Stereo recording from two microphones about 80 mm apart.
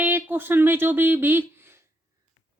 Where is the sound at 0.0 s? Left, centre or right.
Right.